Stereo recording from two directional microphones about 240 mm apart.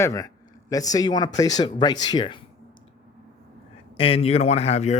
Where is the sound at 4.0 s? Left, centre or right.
Left.